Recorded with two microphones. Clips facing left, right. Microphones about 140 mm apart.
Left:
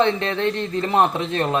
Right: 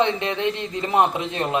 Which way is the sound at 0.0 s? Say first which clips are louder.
Left 2 dB; 15° right (ahead or behind).